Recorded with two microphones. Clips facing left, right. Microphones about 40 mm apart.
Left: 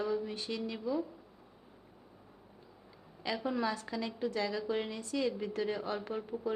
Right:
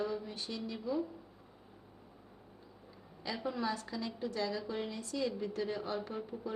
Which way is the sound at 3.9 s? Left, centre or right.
Left.